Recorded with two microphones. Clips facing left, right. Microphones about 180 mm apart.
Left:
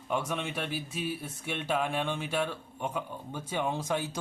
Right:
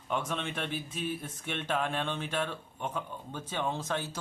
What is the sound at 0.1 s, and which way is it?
Speech, 10° left (ahead or behind).